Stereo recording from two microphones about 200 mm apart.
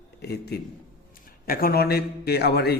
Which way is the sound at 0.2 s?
55° left (ahead or behind).